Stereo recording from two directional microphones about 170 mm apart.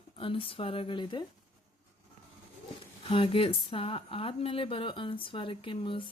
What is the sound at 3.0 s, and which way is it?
Speech, 30° left (ahead or behind).